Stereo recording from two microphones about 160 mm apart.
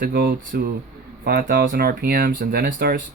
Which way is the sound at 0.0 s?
70° right (ahead or behind).